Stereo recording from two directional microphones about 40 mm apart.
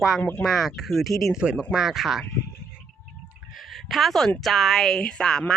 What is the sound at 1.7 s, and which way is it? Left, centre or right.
Speech, centre.